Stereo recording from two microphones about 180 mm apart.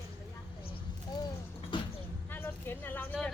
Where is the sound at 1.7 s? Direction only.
25° left (ahead or behind).